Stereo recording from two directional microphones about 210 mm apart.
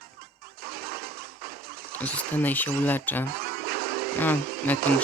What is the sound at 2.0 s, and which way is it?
Speech, 5° left (ahead or behind).